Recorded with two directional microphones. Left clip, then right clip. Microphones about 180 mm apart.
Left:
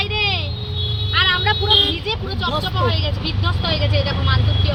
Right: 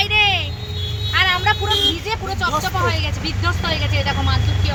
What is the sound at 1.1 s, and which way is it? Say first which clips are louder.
Vehicle: right 1 dB; 30° right (ahead or behind).